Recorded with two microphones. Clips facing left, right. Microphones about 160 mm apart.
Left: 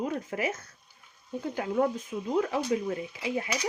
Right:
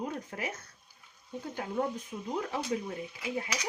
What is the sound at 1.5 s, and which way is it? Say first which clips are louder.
Speech: left 6 dB; 90° left.